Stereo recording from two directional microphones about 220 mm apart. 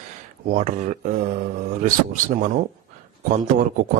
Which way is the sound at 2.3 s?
35° right (ahead or behind).